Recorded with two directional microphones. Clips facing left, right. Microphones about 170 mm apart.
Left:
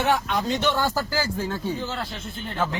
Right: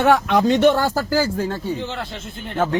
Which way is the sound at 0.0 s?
70° right (ahead or behind).